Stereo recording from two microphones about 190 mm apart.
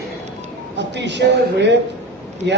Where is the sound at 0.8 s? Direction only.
65° right (ahead or behind).